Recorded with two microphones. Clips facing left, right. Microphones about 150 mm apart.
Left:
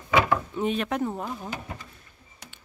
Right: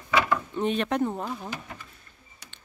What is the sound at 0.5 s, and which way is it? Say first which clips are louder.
Speech: right 1 dB; 5° left (ahead or behind).